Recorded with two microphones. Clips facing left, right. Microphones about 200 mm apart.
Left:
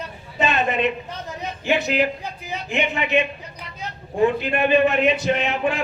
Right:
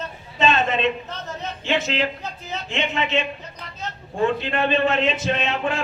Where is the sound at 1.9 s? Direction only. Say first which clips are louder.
Left 3 dB; 15° left (ahead or behind).